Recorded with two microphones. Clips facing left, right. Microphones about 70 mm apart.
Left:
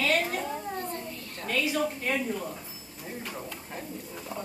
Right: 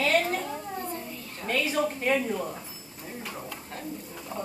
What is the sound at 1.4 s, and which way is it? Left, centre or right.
Speech, right.